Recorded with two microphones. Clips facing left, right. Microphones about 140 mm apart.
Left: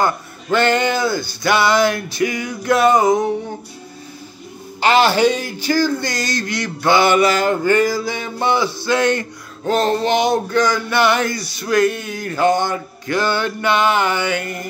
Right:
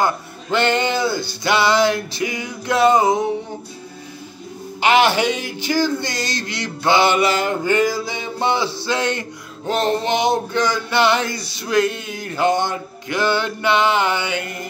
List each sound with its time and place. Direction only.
0.6 s mantra: 20° right (ahead or behind)
4.8 s a man's voice: 35° left (ahead or behind)
5.6 s mantra: 20° right (ahead or behind)